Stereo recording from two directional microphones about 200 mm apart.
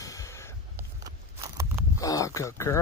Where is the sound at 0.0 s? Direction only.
15° left (ahead or behind).